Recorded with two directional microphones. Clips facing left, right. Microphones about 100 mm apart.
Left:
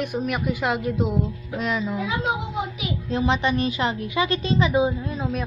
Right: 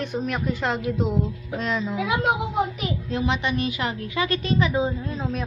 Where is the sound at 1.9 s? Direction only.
70° right (ahead or behind).